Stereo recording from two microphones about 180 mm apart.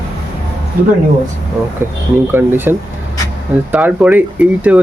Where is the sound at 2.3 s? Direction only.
10° right (ahead or behind).